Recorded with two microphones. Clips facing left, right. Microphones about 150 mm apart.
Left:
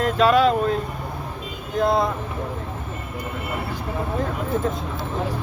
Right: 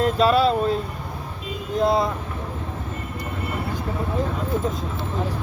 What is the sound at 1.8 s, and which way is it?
Speech, centre (ahead or behind).